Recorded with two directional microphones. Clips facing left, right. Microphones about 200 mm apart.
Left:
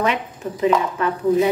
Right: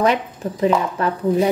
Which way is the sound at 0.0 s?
35° right (ahead or behind).